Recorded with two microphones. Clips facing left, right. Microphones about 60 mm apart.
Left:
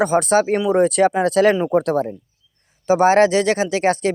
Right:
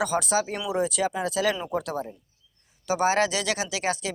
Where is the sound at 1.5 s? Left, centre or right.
Left.